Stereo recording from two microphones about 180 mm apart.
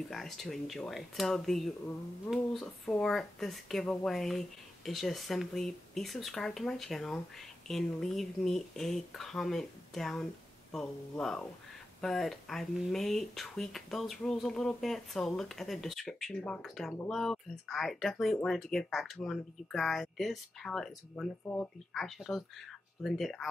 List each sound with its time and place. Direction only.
0.1 s speech: centre (ahead or behind)